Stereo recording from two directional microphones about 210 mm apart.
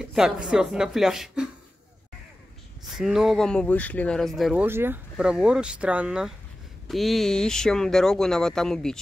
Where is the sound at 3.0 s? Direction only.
Centre (ahead or behind).